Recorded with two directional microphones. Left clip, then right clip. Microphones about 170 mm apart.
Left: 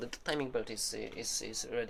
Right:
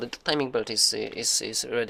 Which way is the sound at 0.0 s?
40° right (ahead or behind).